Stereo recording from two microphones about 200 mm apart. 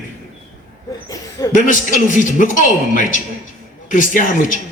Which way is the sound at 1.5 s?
40° left (ahead or behind).